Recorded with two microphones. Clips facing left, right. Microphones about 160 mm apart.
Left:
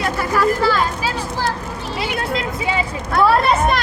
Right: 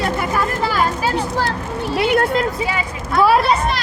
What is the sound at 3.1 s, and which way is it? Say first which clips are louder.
Speech: right 1 dB; 10° right (ahead or behind).